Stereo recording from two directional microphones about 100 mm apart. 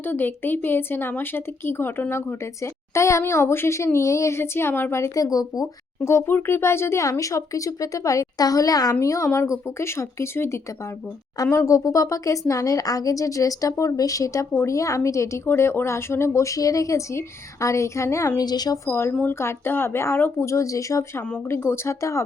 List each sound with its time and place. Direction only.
0.0 s a woman's voice: 20° left (ahead or behind); by 5.6 s 40° left (ahead or behind)
6.1 s a woman's voice: 25° left (ahead or behind)
18.4 s speech: 45° left (ahead or behind)
18.9 s a woman's voice: 25° left (ahead or behind)